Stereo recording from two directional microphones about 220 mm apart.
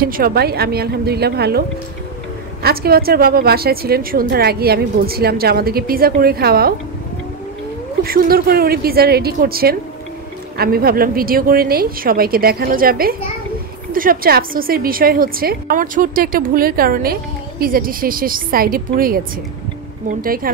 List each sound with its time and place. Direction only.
0.0 s a woman's voice: 40° right (ahead or behind)
2.6 s a woman's voice: 45° right (ahead or behind)
8.0 s a woman's voice: 45° right (ahead or behind)